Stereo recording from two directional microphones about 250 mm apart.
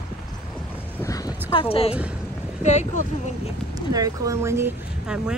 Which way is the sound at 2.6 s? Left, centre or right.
Left.